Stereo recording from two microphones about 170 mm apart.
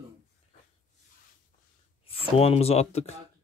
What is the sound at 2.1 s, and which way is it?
Speech, 35° left (ahead or behind).